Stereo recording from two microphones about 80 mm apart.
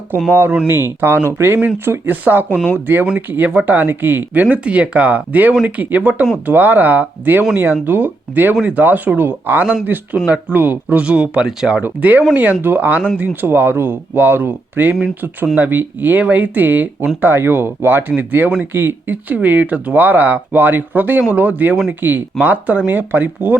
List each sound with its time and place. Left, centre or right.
0.1 s speech: right